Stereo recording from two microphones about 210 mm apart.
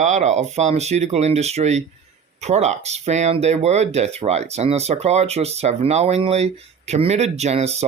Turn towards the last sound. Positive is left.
turn(degrees=-30)  # may be behind; listen again after turning